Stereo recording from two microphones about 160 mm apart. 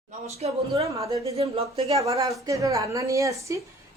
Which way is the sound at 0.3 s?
40° right (ahead or behind).